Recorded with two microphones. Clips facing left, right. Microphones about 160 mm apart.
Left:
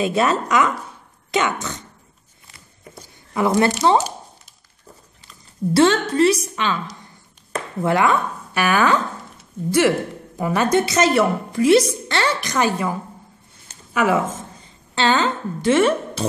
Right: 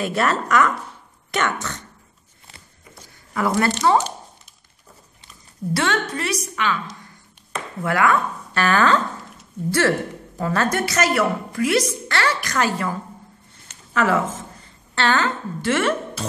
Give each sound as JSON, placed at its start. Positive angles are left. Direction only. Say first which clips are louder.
{"t": 0.0, "sound": "a woman's voice", "louder": "left 3 dB", "side_deg": 15}
{"t": 3.3, "sound": "a woman's voice", "louder": "left 3 dB", "side_deg": 20}
{"t": 5.7, "sound": "a woman's voice", "louder": "left 7 dB", "side_deg": 30}
{"t": 7.8, "sound": "a woman's voice", "louder": "left 2 dB", "side_deg": 25}
{"t": 8.5, "sound": "a woman's voice", "louder": "even", "side_deg": 10}